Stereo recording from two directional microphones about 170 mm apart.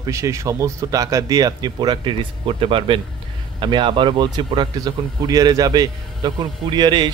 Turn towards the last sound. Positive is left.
turn(degrees=-25)  # may be behind; listen again after turning